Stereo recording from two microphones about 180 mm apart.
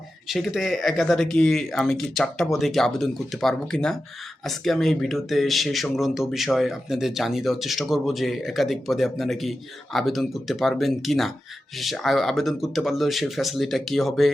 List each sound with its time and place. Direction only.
0.3 s speech: centre (ahead or behind)